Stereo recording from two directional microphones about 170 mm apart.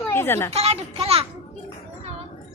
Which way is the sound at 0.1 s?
15° left (ahead or behind).